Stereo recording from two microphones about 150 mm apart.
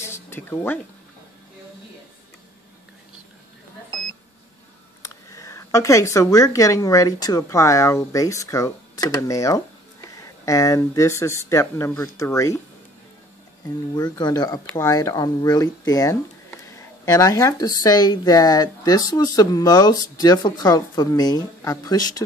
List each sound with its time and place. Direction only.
0.0 s a sound: 15° left (ahead or behind)
5.0 s speech: 20° left (ahead or behind)
13.9 s speech: 25° left (ahead or behind)